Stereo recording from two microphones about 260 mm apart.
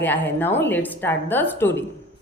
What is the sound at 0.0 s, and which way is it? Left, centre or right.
A woman's voice, centre.